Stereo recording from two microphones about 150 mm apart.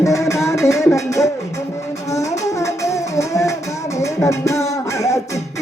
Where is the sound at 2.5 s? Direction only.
20° left (ahead or behind).